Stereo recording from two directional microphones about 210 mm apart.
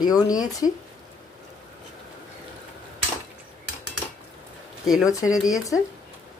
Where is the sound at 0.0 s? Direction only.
20° left (ahead or behind).